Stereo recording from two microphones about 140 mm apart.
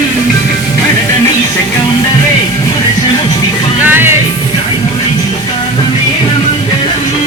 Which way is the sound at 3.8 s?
15° right (ahead or behind).